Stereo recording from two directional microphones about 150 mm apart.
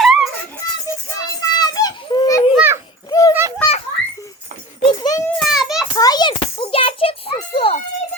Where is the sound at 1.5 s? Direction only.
25° left (ahead or behind).